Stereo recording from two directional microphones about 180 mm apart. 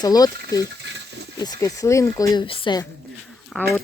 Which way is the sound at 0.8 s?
75° right (ahead or behind).